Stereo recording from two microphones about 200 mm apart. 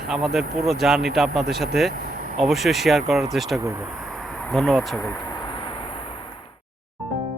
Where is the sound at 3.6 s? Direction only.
15° right (ahead or behind).